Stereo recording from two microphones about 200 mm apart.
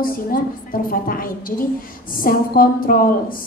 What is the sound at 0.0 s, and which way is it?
A woman's voice, 45° left (ahead or behind).